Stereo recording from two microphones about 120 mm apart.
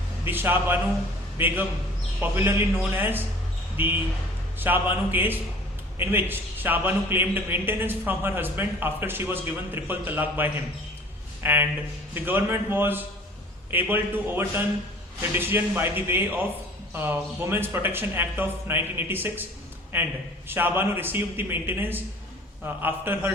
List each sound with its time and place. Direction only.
0.3 s a man's voice: 15° right (ahead or behind)